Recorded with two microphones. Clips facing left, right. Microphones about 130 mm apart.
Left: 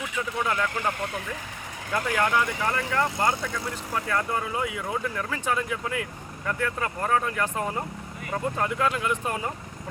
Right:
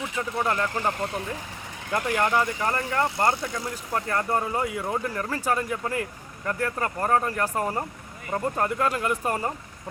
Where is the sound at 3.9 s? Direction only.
40° right (ahead or behind).